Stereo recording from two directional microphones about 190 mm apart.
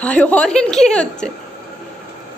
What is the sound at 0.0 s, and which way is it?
A woman's voice, 5° left (ahead or behind).